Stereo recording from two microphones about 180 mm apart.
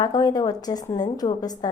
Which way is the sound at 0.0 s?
20° left (ahead or behind).